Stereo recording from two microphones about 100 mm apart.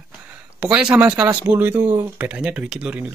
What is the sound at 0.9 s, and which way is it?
Speech, 15° right (ahead or behind).